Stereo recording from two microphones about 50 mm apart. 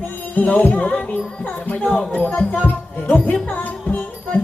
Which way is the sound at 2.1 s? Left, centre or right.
Left.